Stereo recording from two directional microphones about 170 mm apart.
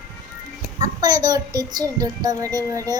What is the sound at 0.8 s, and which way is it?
A child's voice, 25° right (ahead or behind).